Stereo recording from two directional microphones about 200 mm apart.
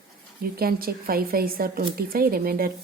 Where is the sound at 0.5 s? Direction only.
50° right (ahead or behind).